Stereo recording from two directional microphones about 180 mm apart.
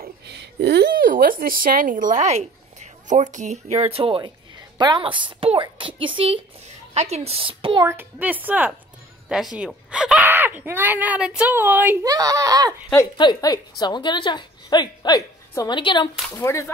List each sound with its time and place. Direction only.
0.0 s a woman's voice: 75° right (ahead or behind); by 7.8 s 30° right (ahead or behind)
7.8 s speech: 10° right (ahead or behind)
13.2 s a woman's voice: 25° left (ahead or behind)
16.3 s speech: 15° left (ahead or behind)